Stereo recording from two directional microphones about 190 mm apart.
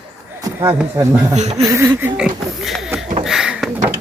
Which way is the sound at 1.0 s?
15° right (ahead or behind).